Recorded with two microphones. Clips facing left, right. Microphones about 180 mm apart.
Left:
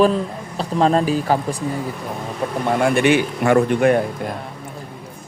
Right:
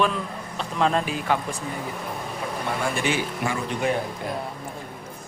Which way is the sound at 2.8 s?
60° left (ahead or behind).